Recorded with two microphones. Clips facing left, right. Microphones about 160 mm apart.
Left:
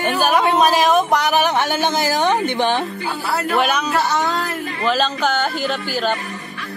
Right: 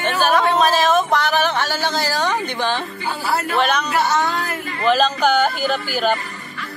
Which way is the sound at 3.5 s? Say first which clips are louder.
Left 1 dB; 10° left (ahead or behind).